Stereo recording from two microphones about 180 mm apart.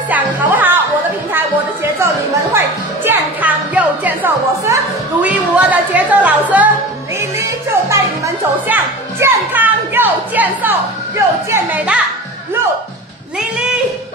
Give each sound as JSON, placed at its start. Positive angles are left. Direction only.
{"t": 0.1, "sound": "music", "side_deg": -10}
{"t": 1.3, "sound": "a sound", "side_deg": -10}
{"t": 2.5, "sound": "music", "side_deg": -10}
{"t": 5.2, "sound": "speech", "side_deg": -10}
{"t": 7.2, "sound": "music", "side_deg": -15}
{"t": 8.6, "sound": "speech", "side_deg": -10}